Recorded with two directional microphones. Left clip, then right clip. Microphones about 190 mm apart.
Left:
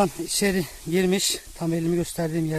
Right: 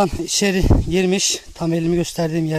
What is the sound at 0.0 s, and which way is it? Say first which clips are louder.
Speech: right 5 dB; 40° right (ahead or behind).